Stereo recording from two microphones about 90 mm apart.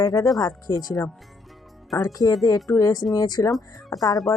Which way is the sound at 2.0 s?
45° left (ahead or behind).